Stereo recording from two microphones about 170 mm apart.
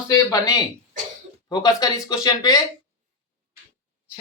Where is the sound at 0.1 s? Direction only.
20° left (ahead or behind).